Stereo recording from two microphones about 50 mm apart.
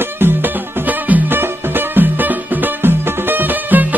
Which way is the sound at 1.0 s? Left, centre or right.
Right.